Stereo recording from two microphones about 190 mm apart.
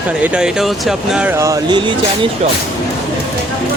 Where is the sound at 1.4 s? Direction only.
20° right (ahead or behind).